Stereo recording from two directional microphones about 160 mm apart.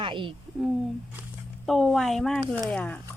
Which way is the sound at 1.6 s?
Centre (ahead or behind).